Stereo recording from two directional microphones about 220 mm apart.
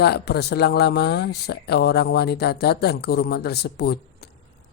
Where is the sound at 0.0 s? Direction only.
45° left (ahead or behind).